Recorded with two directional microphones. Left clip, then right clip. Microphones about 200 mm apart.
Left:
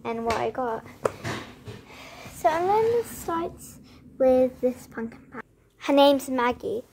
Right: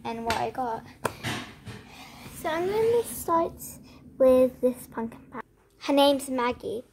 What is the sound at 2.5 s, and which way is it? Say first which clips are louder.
A woman's voice: right 1 dB; 20° left (ahead or behind).